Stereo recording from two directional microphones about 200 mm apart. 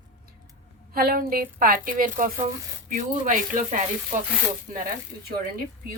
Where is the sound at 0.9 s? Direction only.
45° right (ahead or behind).